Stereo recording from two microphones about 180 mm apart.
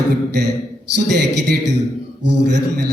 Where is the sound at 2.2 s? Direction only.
70° right (ahead or behind).